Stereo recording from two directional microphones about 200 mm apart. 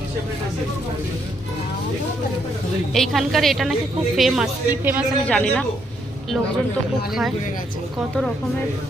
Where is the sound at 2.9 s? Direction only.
Centre (ahead or behind).